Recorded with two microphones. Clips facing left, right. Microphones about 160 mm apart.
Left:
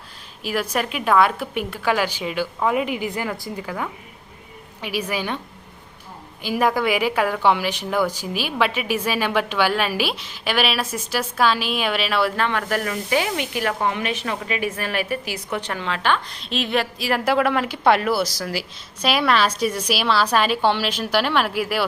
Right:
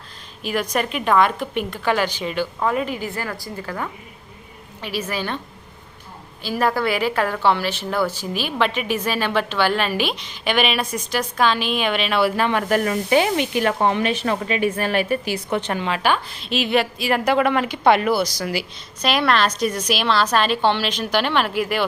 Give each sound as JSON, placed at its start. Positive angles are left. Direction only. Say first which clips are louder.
{"t": 0.4, "sound": "a woman's voice", "louder": "right 1 dB", "side_deg": 5}
{"t": 3.7, "sound": "a woman's voice", "louder": "even", "side_deg": 5}
{"t": 6.4, "sound": "a woman's voice", "louder": "left 1 dB", "side_deg": 10}
{"t": 12.4, "sound": "a woman's voice", "louder": "right 4 dB", "side_deg": -15}